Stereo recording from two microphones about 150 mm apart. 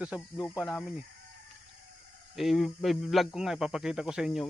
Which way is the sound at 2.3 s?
Centre (ahead or behind).